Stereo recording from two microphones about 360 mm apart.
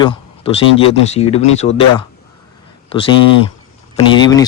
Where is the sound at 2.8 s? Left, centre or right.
Centre.